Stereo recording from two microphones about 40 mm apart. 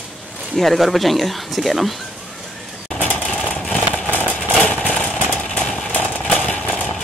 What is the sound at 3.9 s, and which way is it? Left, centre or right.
Vehicle, left.